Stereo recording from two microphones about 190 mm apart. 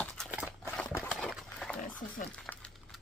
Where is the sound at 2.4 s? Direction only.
5° left (ahead or behind).